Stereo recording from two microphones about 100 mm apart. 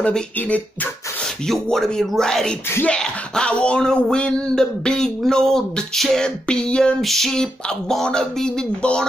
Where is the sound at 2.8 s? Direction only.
10° left (ahead or behind).